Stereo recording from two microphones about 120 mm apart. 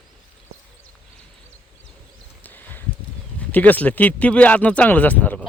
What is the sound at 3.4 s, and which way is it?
Speech, 15° left (ahead or behind).